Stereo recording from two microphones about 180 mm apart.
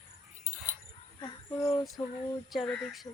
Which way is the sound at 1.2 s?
20° left (ahead or behind).